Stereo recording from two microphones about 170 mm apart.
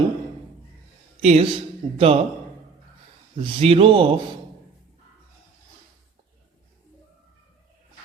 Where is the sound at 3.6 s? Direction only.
35° right (ahead or behind).